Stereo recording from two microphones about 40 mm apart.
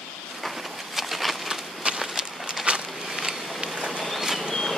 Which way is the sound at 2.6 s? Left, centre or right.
Centre.